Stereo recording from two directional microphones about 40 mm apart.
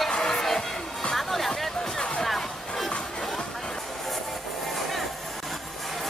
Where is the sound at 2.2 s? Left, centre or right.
Centre.